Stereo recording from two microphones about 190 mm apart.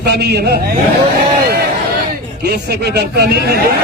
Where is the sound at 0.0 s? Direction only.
60° right (ahead or behind).